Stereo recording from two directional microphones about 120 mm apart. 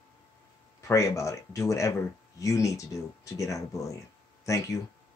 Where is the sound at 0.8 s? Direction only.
25° left (ahead or behind).